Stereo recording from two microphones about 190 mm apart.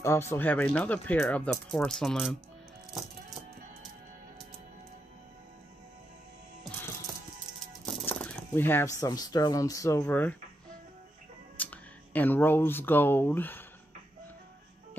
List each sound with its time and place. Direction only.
0.0 s speech: 15° left (ahead or behind)
2.9 s music: centre (ahead or behind)
8.1 s speech: 10° left (ahead or behind)
11.5 s speech: 10° left (ahead or behind)